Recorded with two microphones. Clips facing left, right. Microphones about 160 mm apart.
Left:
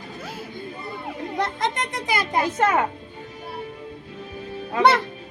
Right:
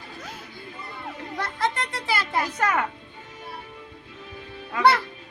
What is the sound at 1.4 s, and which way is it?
A child's voice, 20° left (ahead or behind).